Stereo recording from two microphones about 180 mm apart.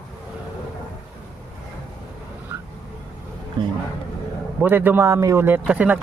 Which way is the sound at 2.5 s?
10° right (ahead or behind).